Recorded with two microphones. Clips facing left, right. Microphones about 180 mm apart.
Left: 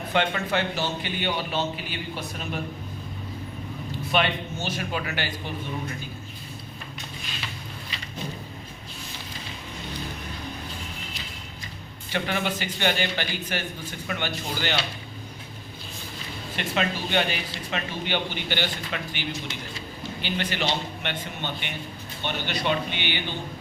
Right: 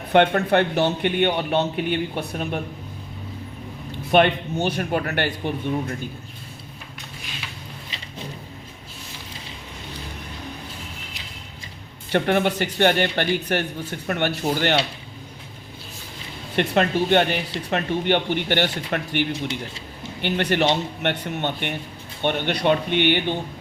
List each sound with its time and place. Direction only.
0.1 s speech: 60° right (ahead or behind)
4.1 s speech: 55° right (ahead or behind)
12.1 s speech: 60° right (ahead or behind)
16.6 s speech: 60° right (ahead or behind)